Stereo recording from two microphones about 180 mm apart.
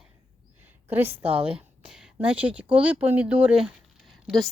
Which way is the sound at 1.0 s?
30° right (ahead or behind).